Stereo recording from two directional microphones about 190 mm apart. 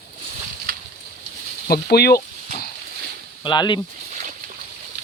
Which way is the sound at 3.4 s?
25° left (ahead or behind).